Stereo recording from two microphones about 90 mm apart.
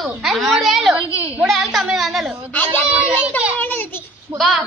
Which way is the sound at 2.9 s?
10° right (ahead or behind).